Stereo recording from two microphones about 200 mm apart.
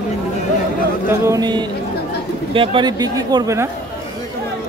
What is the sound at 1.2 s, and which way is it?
Speech, 15° right (ahead or behind).